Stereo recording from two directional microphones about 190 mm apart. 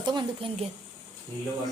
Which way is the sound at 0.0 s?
25° right (ahead or behind).